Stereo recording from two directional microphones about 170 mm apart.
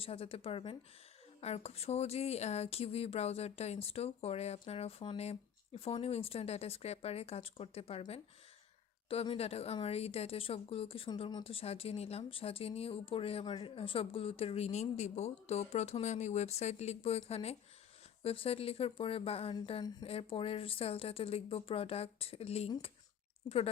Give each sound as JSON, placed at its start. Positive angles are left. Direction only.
{"t": 0.0, "sound": "speech", "side_deg": 35}